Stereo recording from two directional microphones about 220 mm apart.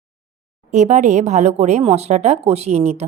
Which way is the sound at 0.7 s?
30° right (ahead or behind).